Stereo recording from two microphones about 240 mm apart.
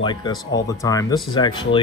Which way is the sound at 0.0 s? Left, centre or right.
Centre.